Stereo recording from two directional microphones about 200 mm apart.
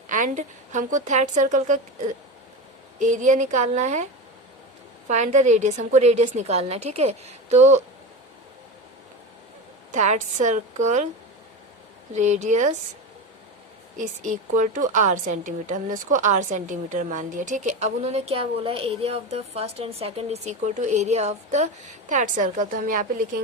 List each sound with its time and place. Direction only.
0.1 s a woman's voice: 40° right (ahead or behind)
5.0 s a woman's voice: 35° right (ahead or behind)
9.9 s a woman's voice: 35° right (ahead or behind)
12.1 s a woman's voice: 35° right (ahead or behind)
14.0 s a woman's voice: 40° right (ahead or behind)